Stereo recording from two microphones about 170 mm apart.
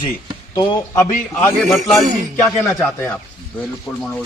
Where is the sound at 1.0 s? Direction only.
15° left (ahead or behind).